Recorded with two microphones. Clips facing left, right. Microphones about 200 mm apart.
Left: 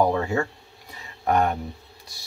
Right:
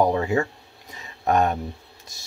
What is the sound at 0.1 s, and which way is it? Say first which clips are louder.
Speech: right 2 dB; 20° right (ahead or behind).